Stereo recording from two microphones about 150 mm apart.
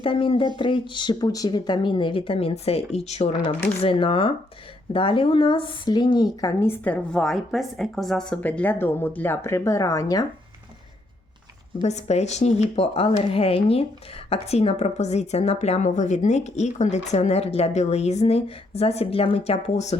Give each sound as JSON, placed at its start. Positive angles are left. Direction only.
{"t": 0.0, "sound": "speech", "side_deg": 35}
{"t": 11.8, "sound": "a woman's voice", "side_deg": 50}